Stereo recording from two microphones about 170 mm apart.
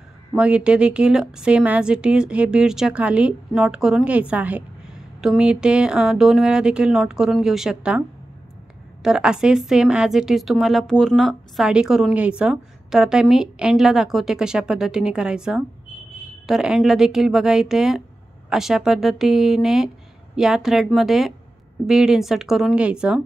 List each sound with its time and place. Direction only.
0.4 s a woman's voice: 5° right (ahead or behind)
9.0 s a woman's voice: 5° right (ahead or behind)